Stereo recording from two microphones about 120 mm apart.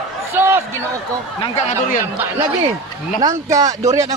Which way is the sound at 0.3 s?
20° right (ahead or behind).